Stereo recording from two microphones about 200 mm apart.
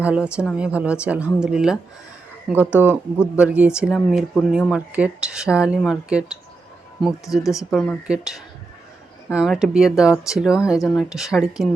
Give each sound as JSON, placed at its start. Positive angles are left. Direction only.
{"t": 0.0, "sound": "speech", "side_deg": -5}
{"t": 7.4, "sound": "speech", "side_deg": 15}
{"t": 7.7, "sound": "speech", "side_deg": 0}